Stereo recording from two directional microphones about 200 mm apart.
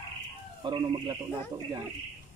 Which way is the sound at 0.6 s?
20° right (ahead or behind).